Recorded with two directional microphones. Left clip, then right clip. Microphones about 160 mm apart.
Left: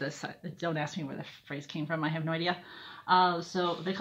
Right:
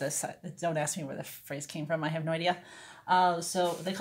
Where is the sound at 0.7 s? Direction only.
15° right (ahead or behind).